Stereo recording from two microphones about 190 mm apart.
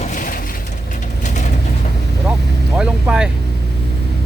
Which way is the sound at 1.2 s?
40° left (ahead or behind).